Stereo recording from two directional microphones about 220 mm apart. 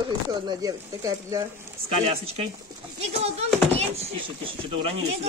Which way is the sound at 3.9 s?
25° right (ahead or behind).